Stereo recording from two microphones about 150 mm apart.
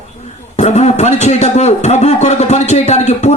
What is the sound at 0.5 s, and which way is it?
A man's voice, 50° left (ahead or behind).